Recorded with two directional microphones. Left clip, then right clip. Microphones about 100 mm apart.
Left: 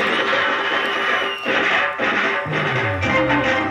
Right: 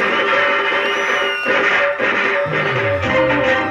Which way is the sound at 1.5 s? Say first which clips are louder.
Right 3 dB; 25° left (ahead or behind).